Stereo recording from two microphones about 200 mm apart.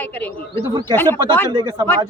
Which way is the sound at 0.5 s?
25° right (ahead or behind).